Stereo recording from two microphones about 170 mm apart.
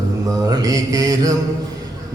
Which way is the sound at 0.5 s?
20° right (ahead or behind).